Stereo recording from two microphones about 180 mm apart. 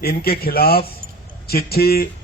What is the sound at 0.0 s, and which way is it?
A man's voice, 60° left (ahead or behind).